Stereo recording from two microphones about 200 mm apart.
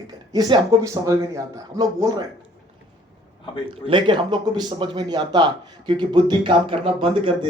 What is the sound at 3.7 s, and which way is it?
Speech, 25° right (ahead or behind).